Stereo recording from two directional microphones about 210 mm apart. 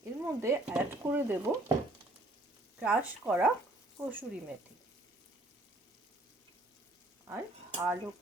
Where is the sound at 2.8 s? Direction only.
5° right (ahead or behind).